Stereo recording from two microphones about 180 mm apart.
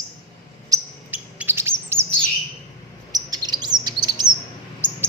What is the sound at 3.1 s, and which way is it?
Chirp, 20° right (ahead or behind).